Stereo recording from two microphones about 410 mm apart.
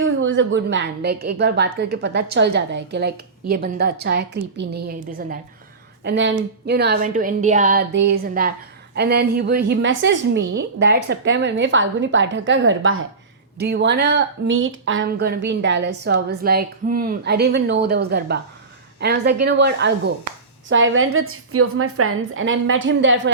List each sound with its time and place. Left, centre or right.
0.0 s a woman's voice: right